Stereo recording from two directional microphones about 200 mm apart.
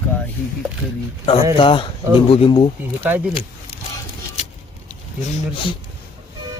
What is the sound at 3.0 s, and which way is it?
Speech, 10° right (ahead or behind).